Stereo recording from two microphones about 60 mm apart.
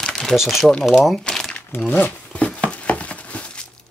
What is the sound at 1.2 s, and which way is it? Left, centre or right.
Crumpling, centre.